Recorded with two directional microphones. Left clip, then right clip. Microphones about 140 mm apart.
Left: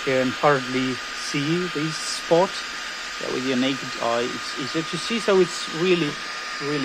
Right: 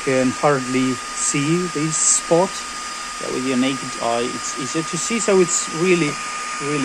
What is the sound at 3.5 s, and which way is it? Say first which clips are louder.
Speech: right 3 dB; 20° left (ahead or behind).